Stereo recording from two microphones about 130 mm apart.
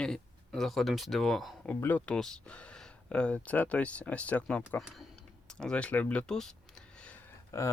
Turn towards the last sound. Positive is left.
turn(degrees=25)  # may be behind; listen again after turning